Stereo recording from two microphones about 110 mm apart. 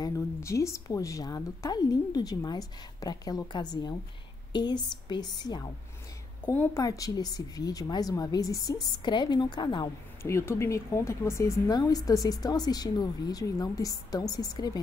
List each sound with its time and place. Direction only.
0.0 s speech: 25° left (ahead or behind); by 5.2 s 40° left (ahead or behind)
6.4 s a woman's voice: 20° left (ahead or behind)
6.8 s speech: 30° left (ahead or behind)
10.2 s speech: 25° left (ahead or behind)